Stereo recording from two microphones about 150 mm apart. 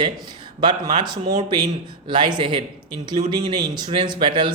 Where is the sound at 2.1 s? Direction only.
30° right (ahead or behind).